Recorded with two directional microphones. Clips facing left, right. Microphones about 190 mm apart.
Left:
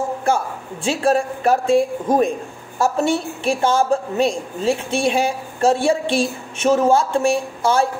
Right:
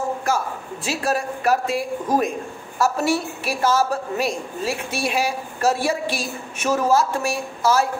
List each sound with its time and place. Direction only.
0.8 s a woman's voice: 30° left (ahead or behind)